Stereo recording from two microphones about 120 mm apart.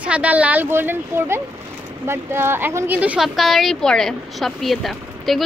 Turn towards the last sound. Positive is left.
turn(degrees=0)  # may be behind; listen again after turning